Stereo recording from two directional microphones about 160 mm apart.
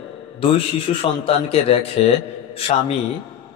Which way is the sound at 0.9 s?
35° left (ahead or behind).